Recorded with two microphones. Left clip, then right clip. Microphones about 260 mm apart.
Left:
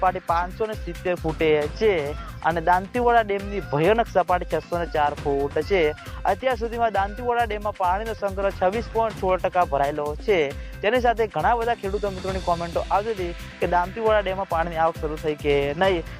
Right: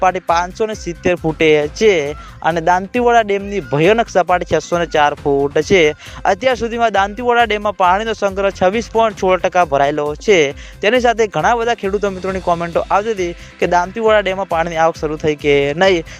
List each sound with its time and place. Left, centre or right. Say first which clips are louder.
0.0 s speech: right 8 dB; right